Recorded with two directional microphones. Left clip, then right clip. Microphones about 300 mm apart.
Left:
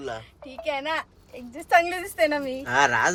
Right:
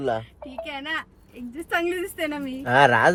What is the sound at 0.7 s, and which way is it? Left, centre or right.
A woman's voice, centre.